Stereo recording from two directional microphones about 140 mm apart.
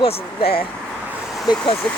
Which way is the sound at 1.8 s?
5° left (ahead or behind).